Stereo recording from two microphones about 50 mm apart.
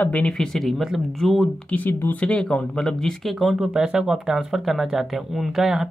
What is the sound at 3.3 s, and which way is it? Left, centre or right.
Speech, centre.